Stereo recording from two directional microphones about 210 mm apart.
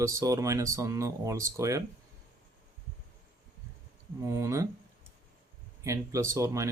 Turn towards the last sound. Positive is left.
turn(degrees=-15)  # may be behind; listen again after turning